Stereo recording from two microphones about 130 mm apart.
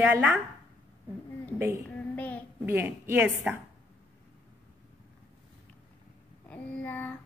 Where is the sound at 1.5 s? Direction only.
20° right (ahead or behind).